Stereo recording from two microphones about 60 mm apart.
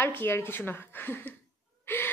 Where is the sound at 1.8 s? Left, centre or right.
Left.